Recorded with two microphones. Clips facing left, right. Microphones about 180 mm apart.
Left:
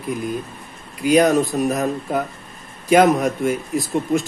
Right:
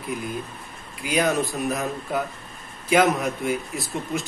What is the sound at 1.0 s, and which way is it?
Speech, 40° left (ahead or behind).